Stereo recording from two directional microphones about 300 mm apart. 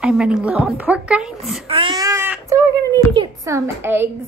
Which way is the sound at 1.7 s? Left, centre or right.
Centre.